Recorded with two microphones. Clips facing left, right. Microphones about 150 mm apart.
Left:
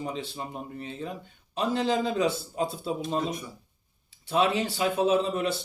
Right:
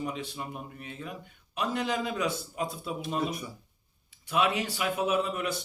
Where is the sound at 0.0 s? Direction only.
30° left (ahead or behind).